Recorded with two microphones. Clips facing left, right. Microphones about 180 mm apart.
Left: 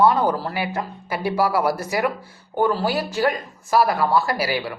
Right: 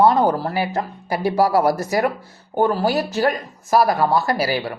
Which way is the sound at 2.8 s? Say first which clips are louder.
Right 2 dB; 40° right (ahead or behind).